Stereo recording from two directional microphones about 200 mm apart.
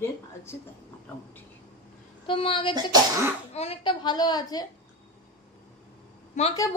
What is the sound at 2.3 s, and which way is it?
A woman's voice, 25° left (ahead or behind).